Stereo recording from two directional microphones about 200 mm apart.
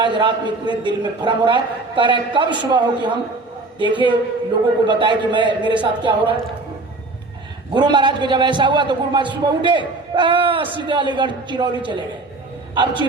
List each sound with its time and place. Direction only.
0.0 s a man's voice: 25° right (ahead or behind)
7.7 s a man's voice: 20° right (ahead or behind)